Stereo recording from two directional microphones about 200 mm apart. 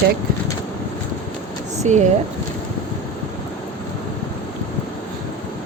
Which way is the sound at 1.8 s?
35° right (ahead or behind).